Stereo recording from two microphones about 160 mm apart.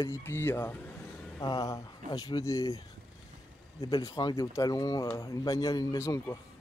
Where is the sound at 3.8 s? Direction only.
20° left (ahead or behind).